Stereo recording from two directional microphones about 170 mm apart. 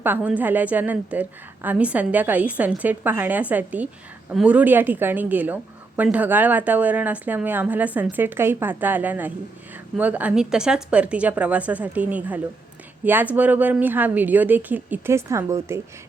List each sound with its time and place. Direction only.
0.0 s a woman's voice: 10° right (ahead or behind)